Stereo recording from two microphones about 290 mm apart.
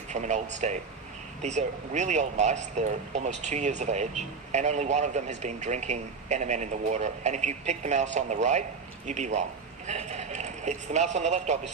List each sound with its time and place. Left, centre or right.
0.1 s speech: right